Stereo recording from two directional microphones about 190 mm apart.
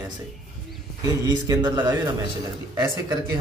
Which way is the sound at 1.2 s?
20° right (ahead or behind).